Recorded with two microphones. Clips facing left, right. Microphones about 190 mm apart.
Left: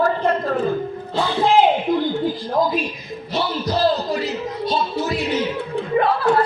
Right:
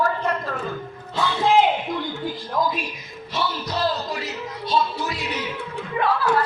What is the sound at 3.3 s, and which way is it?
Music, 30° left (ahead or behind).